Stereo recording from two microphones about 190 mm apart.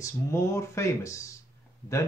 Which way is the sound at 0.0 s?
15° left (ahead or behind).